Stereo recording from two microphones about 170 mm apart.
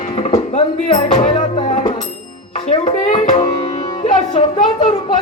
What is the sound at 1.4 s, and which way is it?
Music, 45° left (ahead or behind).